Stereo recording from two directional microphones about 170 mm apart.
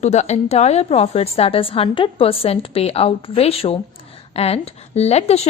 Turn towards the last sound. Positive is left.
turn(degrees=40)  # may be behind; listen again after turning